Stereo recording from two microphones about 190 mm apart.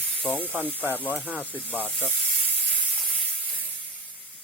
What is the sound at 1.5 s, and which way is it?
Speech, 10° left (ahead or behind).